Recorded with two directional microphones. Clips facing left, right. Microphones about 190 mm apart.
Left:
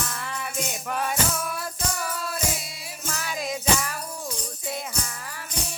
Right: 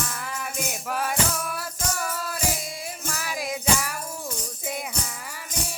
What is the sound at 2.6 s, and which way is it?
Music, 50° right (ahead or behind).